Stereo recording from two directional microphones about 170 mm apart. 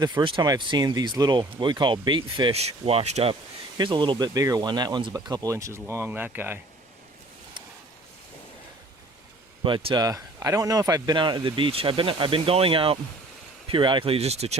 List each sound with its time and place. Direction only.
0.0 s speech: 25° right (ahead or behind)
3.8 s speech: 25° right (ahead or behind); by 6.6 s 10° right (ahead or behind)
9.6 s speech: 30° right (ahead or behind)